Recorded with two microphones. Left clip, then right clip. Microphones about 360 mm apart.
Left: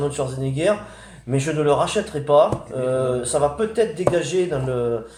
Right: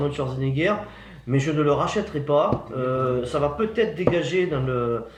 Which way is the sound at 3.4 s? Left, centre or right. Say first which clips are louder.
Left 3 dB; centre.